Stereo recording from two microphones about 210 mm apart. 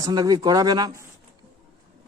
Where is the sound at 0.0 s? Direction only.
20° right (ahead or behind).